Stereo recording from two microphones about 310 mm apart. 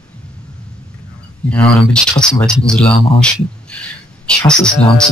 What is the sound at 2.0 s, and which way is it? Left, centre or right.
Speech, centre.